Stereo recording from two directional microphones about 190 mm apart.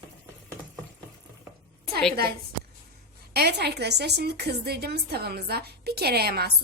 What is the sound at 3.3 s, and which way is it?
A woman's voice, 60° right (ahead or behind).